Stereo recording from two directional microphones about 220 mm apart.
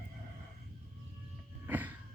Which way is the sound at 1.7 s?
5° right (ahead or behind).